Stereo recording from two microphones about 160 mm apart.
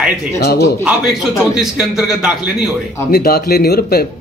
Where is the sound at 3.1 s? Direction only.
75° left (ahead or behind).